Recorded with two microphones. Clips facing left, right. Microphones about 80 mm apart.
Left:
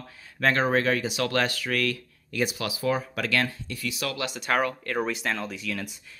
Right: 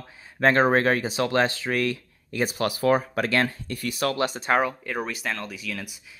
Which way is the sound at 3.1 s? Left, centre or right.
Right.